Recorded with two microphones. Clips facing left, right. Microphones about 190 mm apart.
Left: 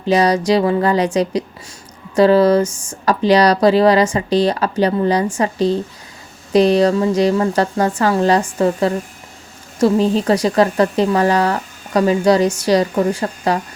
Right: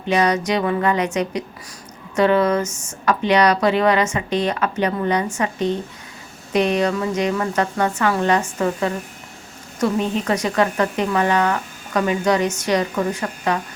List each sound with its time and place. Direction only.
0.0 s speech: 35° left (ahead or behind)